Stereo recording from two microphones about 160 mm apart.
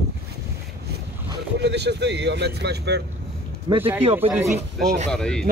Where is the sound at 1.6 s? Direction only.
90° right.